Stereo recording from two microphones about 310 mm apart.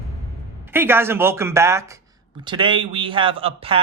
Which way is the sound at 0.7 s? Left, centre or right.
Centre.